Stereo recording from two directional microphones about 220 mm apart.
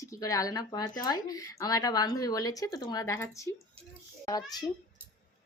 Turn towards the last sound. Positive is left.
turn(degrees=15)  # may be behind; listen again after turning